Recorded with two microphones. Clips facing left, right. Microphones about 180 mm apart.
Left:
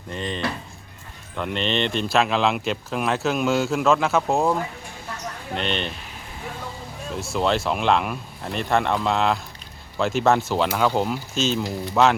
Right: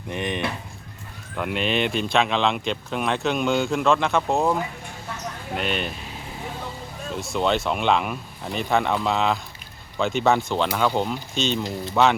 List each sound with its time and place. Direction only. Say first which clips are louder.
0.1 s speech: right 1 dB; 15° right (ahead or behind)
7.1 s speech: even; centre (ahead or behind)